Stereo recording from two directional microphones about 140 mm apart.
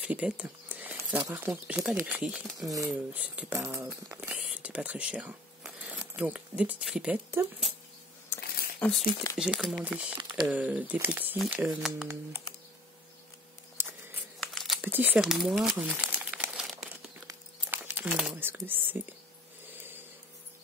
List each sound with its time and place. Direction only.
0.0 s speech: 10° right (ahead or behind)
2.4 s speech: 25° right (ahead or behind)
2.9 s speech: 10° right (ahead or behind)
8.3 s a sound: 15° left (ahead or behind)
8.7 s speech: 5° left (ahead or behind)
9.4 s speech: 5° right (ahead or behind)
13.8 s a sound: 15° right (ahead or behind)
14.4 s crumpling: centre (ahead or behind)
14.8 s speech: 15° right (ahead or behind)
16.2 s crumpling: 5° right (ahead or behind)
17.3 s crumpling: 15° right (ahead or behind)